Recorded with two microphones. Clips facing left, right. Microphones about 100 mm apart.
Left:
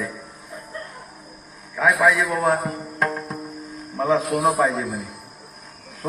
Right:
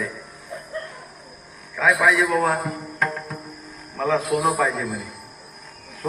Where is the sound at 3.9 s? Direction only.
25° left (ahead or behind).